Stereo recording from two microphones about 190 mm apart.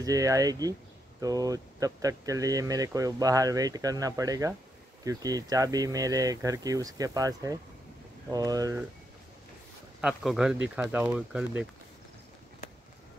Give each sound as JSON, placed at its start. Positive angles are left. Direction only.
{"t": 0.0, "sound": "speech", "side_deg": -15}
{"t": 10.0, "sound": "speech", "side_deg": -5}